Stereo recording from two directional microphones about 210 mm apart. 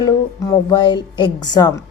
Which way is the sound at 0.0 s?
15° left (ahead or behind).